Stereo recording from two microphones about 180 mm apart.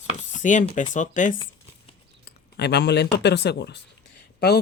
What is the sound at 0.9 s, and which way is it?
Speech, 45° left (ahead or behind).